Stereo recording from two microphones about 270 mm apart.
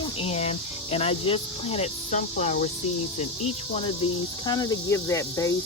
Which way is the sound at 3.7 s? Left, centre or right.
Centre.